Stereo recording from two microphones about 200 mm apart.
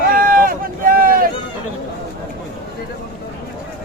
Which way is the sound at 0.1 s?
45° right (ahead or behind).